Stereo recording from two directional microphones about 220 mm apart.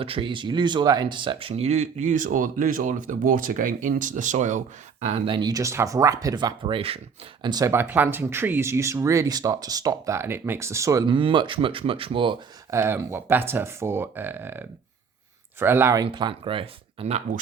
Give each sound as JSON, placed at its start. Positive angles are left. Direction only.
{"t": 0.0, "sound": "speech", "side_deg": -25}
{"t": 12.7, "sound": "speech", "side_deg": -10}